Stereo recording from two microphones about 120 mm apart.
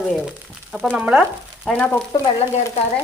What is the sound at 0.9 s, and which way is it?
Frying, 10° right (ahead or behind).